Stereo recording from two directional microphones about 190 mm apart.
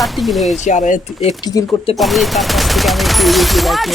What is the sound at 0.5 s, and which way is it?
Speech, 40° left (ahead or behind).